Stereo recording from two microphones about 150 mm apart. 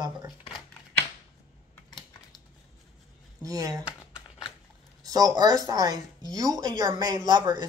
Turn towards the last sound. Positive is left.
turn(degrees=-25)  # may be behind; listen again after turning